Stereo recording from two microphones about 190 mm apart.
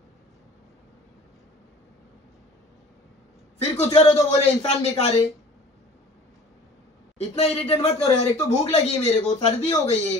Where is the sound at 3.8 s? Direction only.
30° left (ahead or behind).